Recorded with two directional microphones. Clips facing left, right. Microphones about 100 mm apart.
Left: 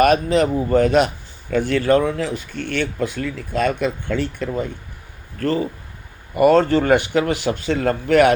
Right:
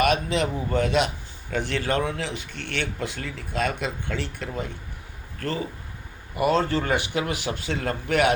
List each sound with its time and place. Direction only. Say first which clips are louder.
0.0 s speech: left 7 dB; 45° left (ahead or behind)
6.3 s speech: left 8 dB; 55° left (ahead or behind)
7.4 s speech: left 8 dB; 75° left (ahead or behind)